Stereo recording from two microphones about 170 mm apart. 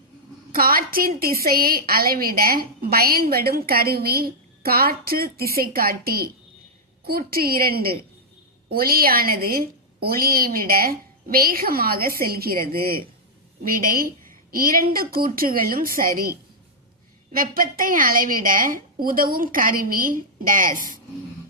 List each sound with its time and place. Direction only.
0.5 s a woman's voice: 60° right (ahead or behind)